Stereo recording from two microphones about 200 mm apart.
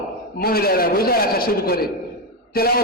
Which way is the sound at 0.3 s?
50° left (ahead or behind).